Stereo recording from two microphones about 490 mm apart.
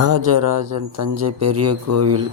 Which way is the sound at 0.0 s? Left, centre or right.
Right.